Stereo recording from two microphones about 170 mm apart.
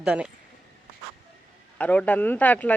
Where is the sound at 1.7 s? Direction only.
10° left (ahead or behind).